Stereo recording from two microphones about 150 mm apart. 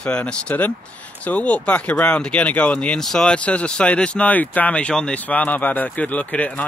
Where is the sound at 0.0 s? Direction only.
5° left (ahead or behind).